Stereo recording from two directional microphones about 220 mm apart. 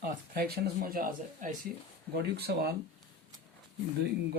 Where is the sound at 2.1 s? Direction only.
50° right (ahead or behind).